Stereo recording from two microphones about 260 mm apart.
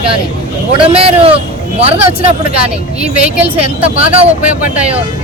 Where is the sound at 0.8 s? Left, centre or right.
Right.